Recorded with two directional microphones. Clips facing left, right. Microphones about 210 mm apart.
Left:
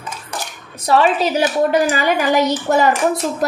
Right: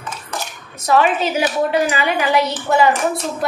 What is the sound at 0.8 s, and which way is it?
A child's voice, 35° left (ahead or behind).